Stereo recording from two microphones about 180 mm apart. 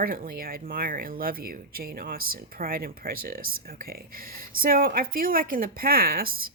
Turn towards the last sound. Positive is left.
turn(degrees=-55)  # may be behind; listen again after turning